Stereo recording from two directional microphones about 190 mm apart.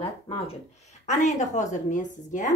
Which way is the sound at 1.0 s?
40° left (ahead or behind).